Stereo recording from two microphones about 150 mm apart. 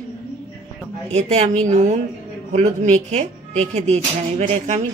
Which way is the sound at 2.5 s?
50° right (ahead or behind).